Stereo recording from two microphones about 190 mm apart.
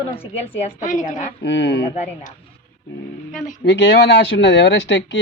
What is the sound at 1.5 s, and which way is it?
Speech, 65° left (ahead or behind).